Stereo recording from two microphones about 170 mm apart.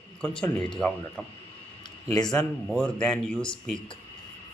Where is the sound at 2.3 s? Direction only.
5° left (ahead or behind).